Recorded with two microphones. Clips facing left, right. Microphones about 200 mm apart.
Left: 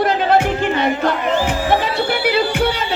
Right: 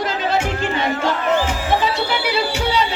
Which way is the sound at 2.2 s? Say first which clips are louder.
Left 4 dB; 55° left (ahead or behind).